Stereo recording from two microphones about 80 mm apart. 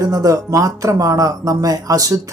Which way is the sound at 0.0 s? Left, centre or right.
Right.